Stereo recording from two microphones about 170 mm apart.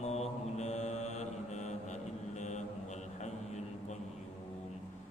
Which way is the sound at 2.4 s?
45° left (ahead or behind).